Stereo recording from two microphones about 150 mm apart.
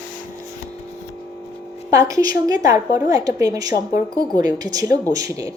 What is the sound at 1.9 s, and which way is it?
Speech, 20° right (ahead or behind).